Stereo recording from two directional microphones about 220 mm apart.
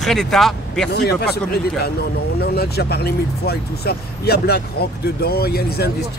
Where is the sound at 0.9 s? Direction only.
45° left (ahead or behind).